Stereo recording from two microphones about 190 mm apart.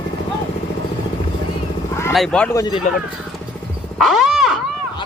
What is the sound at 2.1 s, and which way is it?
Speech, 5° left (ahead or behind).